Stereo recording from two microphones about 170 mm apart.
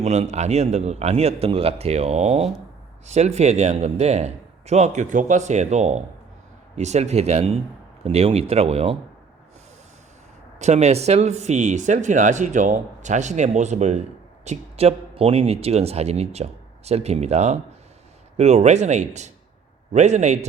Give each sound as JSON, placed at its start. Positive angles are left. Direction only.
{"t": 0.0, "sound": "speech", "side_deg": -40}
{"t": 10.6, "sound": "speech", "side_deg": -40}